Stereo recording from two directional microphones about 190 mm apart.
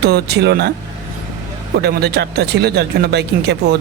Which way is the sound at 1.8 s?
60° right (ahead or behind).